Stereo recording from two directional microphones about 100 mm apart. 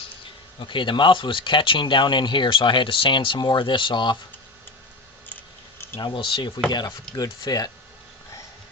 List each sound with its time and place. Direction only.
0.6 s speech: 55° left (ahead or behind)
6.0 s speech: 50° left (ahead or behind)
6.7 s speech: 45° left (ahead or behind)